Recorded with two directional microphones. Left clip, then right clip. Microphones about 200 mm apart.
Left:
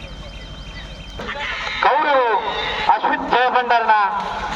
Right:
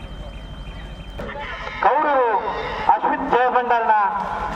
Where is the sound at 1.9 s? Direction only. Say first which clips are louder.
Left 1 dB; 15° right (ahead or behind).